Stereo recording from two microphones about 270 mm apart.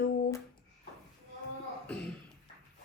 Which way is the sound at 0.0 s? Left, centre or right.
Left.